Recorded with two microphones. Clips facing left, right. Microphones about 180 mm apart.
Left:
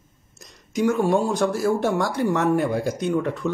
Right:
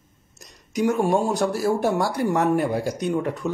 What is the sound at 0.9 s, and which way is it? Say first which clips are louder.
Speech: even; 20° right (ahead or behind).